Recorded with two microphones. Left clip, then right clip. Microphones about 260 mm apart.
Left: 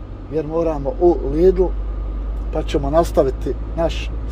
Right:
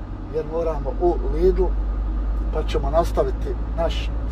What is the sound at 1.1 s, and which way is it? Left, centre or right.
Speech, left.